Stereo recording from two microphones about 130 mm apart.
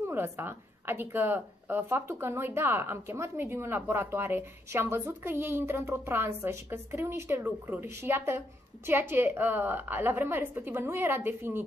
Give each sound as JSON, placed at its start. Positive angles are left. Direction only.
{"t": 0.0, "sound": "a woman's voice", "side_deg": -20}